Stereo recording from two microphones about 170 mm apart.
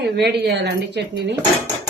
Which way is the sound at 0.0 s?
75° right (ahead or behind).